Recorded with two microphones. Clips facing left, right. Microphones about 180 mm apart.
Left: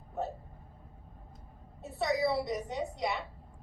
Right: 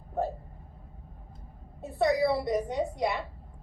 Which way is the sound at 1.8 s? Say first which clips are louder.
Right 5 dB; 55° right (ahead or behind).